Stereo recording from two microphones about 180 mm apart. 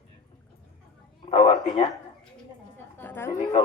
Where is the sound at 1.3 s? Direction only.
35° left (ahead or behind).